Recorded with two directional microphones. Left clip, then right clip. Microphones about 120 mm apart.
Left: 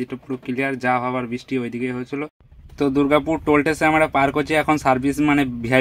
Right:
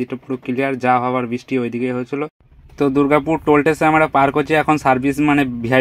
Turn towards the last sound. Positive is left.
turn(degrees=-10)  # may be behind; listen again after turning